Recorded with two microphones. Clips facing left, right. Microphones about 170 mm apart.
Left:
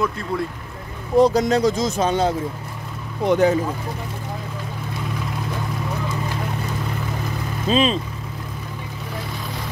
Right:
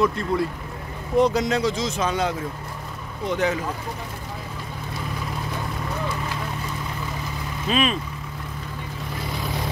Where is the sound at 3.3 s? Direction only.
35° left (ahead or behind).